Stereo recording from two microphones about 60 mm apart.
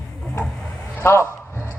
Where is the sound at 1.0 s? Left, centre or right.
Left.